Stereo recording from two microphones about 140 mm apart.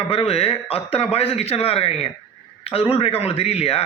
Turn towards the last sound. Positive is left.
turn(degrees=45)  # may be behind; listen again after turning